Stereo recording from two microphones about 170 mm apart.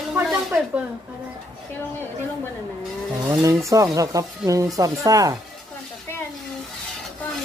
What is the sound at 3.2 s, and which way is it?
Speech, 20° right (ahead or behind).